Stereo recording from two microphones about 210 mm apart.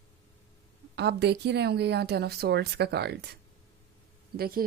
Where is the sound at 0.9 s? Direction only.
50° right (ahead or behind).